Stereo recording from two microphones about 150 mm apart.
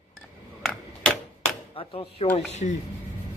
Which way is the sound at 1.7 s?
40° left (ahead or behind).